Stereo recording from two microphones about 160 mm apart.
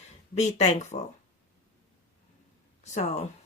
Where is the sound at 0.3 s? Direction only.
45° left (ahead or behind).